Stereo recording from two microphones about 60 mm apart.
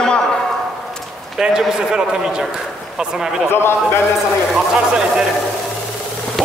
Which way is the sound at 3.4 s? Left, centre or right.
Left.